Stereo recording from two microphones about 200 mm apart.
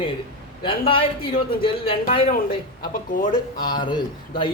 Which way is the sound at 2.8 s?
45° left (ahead or behind).